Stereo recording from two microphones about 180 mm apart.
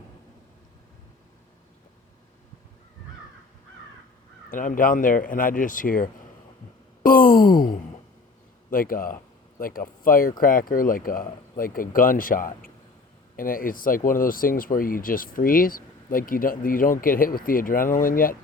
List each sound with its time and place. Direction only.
4.4 s speech: 50° left (ahead or behind)
7.0 s a sound: 55° left (ahead or behind)
8.7 s speech: 50° left (ahead or behind)